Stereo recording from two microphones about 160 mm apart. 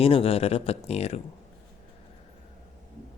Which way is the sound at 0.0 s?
35° left (ahead or behind).